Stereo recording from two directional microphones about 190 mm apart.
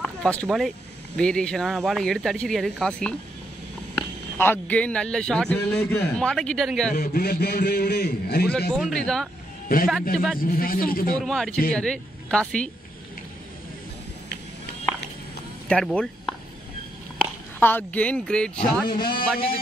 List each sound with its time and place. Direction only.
0.0 s speech: 5° left (ahead or behind)
4.4 s speech: 10° left (ahead or behind)
6.9 s a man's voice: 50° left (ahead or behind)
8.5 s speech: 5° left (ahead or behind)
10.4 s speech: 50° left (ahead or behind)
11.1 s speech: centre (ahead or behind)
15.7 s speech: 5° left (ahead or behind)
18.9 s speech: 25° left (ahead or behind)